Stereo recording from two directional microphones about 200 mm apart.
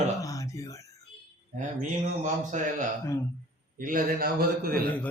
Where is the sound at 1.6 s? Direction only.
40° right (ahead or behind).